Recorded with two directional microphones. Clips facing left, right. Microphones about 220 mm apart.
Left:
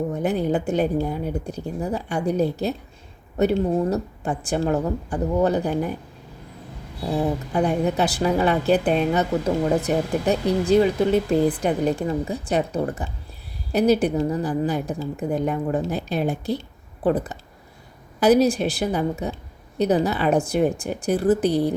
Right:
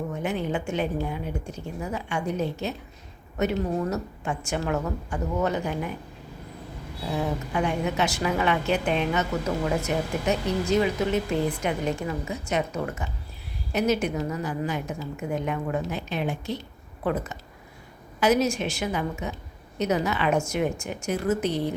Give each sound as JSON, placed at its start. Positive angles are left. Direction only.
{"t": 0.1, "sound": "a woman's voice", "side_deg": 35}
{"t": 7.1, "sound": "a woman's voice", "side_deg": 35}